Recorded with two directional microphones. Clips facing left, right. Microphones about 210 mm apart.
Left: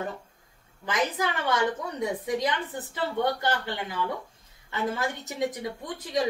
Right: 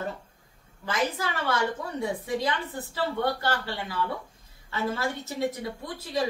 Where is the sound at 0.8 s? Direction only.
15° left (ahead or behind).